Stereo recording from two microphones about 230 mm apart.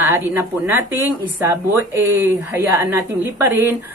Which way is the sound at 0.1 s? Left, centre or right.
Centre.